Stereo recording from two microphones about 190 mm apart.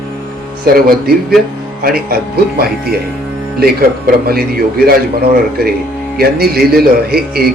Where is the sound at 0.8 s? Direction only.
50° right (ahead or behind).